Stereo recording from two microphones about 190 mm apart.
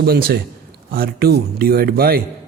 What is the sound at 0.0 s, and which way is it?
A man's voice, 55° right (ahead or behind).